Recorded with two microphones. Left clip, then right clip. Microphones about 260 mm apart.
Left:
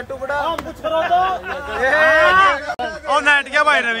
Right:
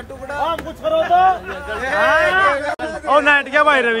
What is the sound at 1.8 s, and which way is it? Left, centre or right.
Speech, left.